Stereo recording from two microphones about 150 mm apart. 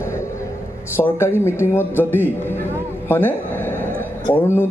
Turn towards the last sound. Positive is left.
turn(degrees=15)  # may be behind; listen again after turning